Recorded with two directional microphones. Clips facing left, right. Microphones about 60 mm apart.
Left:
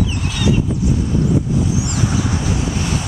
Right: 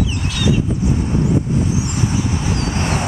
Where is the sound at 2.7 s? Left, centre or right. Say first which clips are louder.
Right 1 dB; right.